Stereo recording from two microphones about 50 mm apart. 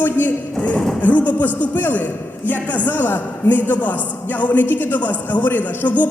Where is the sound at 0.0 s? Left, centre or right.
Left.